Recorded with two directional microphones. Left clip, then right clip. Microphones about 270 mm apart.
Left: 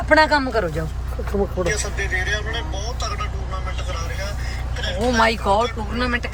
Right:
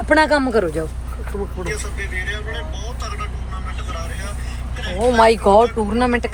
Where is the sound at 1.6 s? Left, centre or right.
Left.